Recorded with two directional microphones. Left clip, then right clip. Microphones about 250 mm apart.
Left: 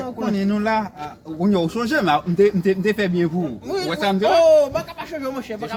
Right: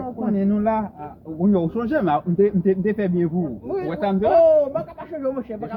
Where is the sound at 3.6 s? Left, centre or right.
Centre.